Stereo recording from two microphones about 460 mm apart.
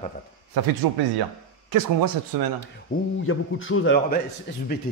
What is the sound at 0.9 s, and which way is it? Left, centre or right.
Speech, right.